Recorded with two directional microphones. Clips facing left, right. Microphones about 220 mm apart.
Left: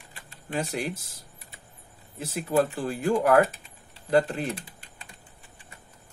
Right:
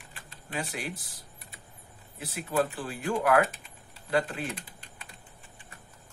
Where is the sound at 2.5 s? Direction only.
40° left (ahead or behind).